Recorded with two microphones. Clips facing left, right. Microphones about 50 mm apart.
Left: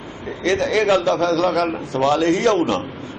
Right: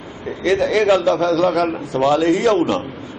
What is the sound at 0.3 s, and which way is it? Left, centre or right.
A man's voice, centre.